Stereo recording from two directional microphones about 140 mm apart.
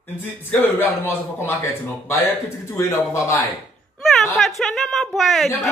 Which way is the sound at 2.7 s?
20° left (ahead or behind).